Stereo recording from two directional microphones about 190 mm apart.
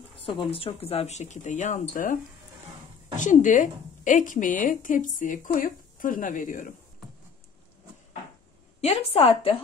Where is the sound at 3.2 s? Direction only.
40° left (ahead or behind).